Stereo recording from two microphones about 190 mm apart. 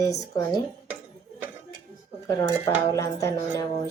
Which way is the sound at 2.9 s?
15° left (ahead or behind).